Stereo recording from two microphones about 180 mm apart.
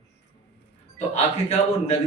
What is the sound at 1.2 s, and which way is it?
Speech, 35° left (ahead or behind).